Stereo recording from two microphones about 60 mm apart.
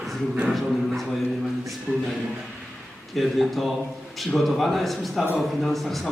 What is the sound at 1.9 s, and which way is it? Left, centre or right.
Speech, centre.